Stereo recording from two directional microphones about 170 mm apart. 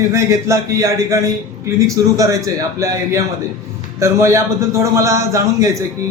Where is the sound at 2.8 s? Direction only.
15° right (ahead or behind).